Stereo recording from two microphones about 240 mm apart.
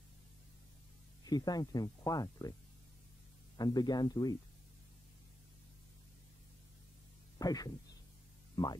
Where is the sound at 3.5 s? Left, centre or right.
Centre.